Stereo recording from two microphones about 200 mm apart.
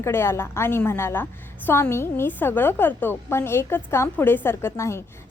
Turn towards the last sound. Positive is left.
turn(degrees=15)  # may be behind; listen again after turning